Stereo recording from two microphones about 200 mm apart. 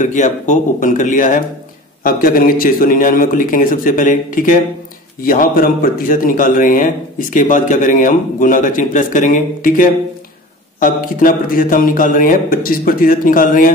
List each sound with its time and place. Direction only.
0.0 s speech: 40° left (ahead or behind)